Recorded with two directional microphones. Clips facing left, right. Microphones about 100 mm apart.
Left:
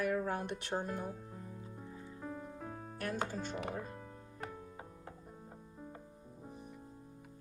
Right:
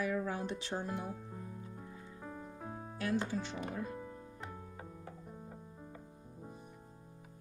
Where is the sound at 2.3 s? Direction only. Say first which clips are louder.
Right 2 dB; 20° right (ahead or behind).